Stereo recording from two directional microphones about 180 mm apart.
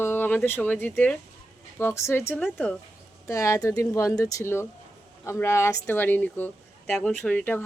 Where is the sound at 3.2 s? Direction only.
15° left (ahead or behind).